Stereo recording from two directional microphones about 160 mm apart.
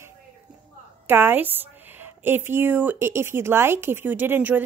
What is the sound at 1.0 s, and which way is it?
A woman's voice, 15° right (ahead or behind).